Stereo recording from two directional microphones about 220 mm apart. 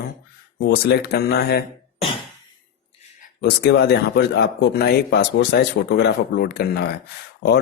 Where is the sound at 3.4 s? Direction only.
50° left (ahead or behind).